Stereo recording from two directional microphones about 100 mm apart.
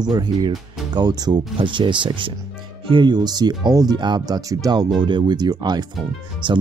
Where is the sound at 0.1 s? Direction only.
45° right (ahead or behind).